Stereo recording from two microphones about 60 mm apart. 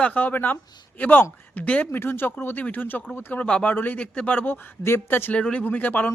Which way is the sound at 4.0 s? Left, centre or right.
Centre.